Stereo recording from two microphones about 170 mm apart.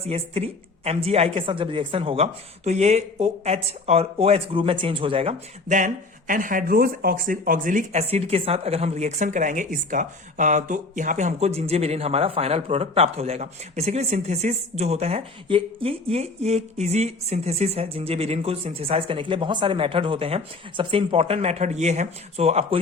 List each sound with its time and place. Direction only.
0.0 s a woman's voice: 35° right (ahead or behind)
8.0 s a woman's voice: 35° right (ahead or behind)